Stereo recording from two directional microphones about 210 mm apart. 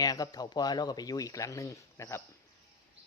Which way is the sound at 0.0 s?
20° left (ahead or behind).